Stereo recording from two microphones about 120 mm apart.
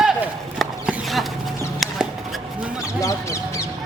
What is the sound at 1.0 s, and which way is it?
Chicken, centre (ahead or behind).